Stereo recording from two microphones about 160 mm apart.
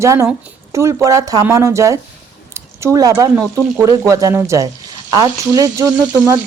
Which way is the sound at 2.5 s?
15° right (ahead or behind).